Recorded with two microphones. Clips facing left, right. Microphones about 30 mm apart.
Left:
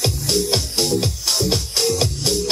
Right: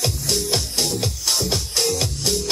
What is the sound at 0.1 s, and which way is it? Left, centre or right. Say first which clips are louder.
Music: left 3 dB; centre.